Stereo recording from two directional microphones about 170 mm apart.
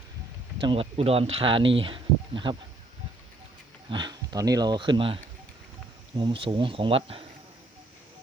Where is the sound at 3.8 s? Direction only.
25° right (ahead or behind).